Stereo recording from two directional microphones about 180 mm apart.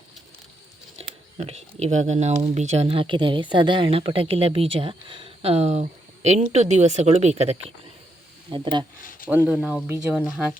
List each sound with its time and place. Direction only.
1.4 s speech: 35° right (ahead or behind)
9.3 s speech: 10° right (ahead or behind)